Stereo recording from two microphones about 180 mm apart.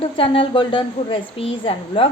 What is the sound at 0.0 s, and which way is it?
A woman's voice, 30° left (ahead or behind).